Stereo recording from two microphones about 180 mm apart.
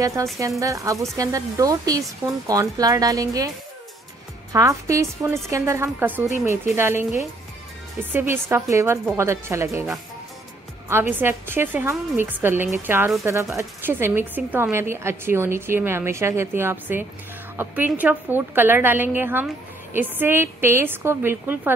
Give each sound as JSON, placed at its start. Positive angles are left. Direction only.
{"t": 0.0, "sound": "speech", "side_deg": -15}
{"t": 8.1, "sound": "speech", "side_deg": -10}